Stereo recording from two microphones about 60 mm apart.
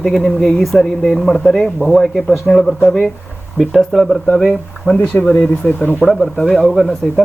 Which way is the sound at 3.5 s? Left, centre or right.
Centre.